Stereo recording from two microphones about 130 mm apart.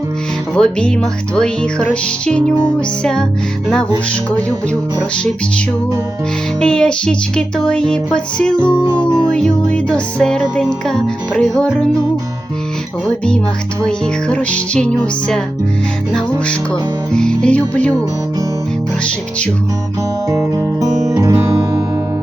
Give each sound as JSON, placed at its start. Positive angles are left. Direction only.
{"t": 0.5, "sound": "music", "side_deg": 5}
{"t": 6.6, "sound": "music", "side_deg": 5}
{"t": 13.1, "sound": "music", "side_deg": 5}
{"t": 17.1, "sound": "music", "side_deg": 5}
{"t": 20.3, "sound": "guitar", "side_deg": -25}